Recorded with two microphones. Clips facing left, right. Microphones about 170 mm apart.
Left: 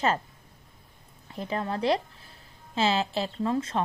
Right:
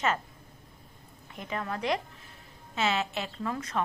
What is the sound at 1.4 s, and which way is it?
Speech, 30° left (ahead or behind).